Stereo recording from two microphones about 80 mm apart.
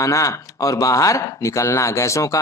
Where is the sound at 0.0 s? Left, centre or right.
Left.